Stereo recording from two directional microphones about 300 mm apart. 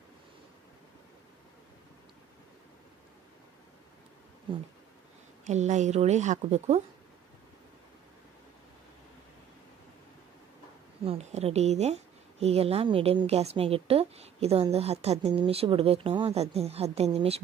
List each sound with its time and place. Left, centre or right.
5.4 s a woman's voice: right
11.1 s a woman's voice: right